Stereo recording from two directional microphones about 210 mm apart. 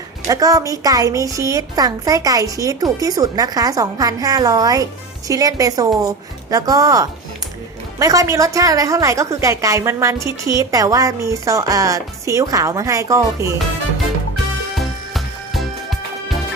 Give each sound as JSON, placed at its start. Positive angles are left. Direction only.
{"t": 0.3, "sound": "a woman's voice", "side_deg": -15}
{"t": 14.8, "sound": "music", "side_deg": 0}